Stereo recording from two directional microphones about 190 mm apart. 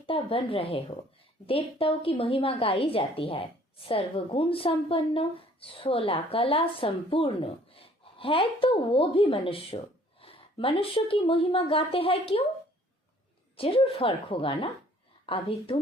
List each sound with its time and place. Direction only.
0.0 s a woman's voice: 30° left (ahead or behind)
13.6 s a woman's voice: 30° left (ahead or behind)